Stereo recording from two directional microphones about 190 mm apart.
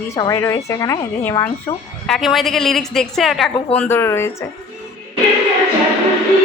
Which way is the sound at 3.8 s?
10° left (ahead or behind).